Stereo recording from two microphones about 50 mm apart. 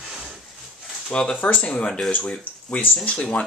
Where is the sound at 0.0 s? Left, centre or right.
Centre.